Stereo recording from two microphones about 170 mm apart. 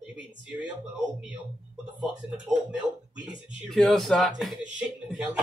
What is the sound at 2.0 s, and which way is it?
Speech, 5° right (ahead or behind).